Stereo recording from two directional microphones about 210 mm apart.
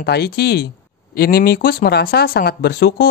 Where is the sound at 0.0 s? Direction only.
50° left (ahead or behind).